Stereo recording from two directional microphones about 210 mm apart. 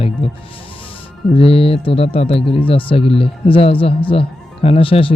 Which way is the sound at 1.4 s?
25° left (ahead or behind).